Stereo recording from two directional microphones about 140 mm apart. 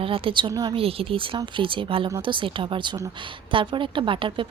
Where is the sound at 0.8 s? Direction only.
40° right (ahead or behind).